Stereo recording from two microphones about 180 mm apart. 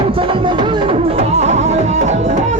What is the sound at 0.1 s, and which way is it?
Music, 30° right (ahead or behind).